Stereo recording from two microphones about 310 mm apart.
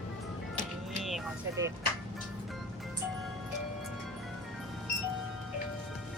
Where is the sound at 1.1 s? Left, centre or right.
Centre.